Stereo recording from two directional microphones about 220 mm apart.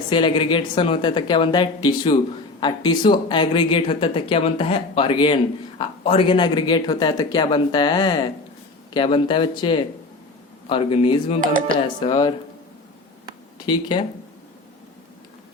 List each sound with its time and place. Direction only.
0.1 s speech: 20° left (ahead or behind)
13.7 s speech: 20° left (ahead or behind)